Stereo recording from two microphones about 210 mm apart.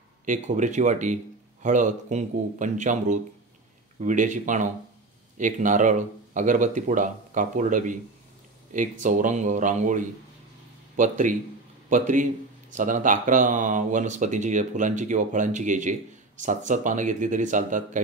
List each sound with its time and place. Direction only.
0.2 s speech: 35° right (ahead or behind)
9.0 s speech: 35° right (ahead or behind)